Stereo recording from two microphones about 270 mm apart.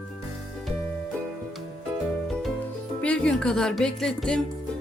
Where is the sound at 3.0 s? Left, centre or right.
Centre.